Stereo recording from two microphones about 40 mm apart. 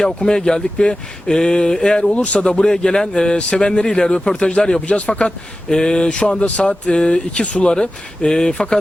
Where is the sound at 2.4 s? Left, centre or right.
Centre.